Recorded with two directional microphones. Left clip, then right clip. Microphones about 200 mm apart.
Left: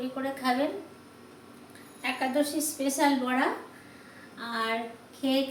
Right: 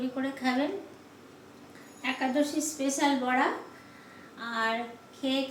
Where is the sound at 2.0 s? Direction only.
5° left (ahead or behind).